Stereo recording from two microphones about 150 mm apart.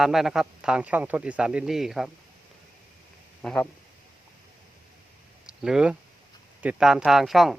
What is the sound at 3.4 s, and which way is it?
Speech, 5° left (ahead or behind).